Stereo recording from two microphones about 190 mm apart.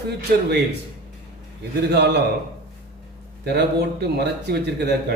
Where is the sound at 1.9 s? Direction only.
60° right (ahead or behind).